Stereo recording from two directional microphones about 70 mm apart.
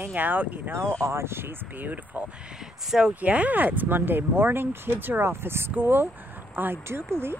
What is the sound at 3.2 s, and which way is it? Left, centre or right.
Speech, right.